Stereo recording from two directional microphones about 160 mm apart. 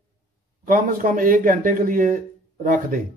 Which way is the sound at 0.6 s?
55° right (ahead or behind).